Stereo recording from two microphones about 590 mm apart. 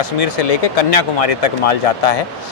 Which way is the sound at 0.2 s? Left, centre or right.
Left.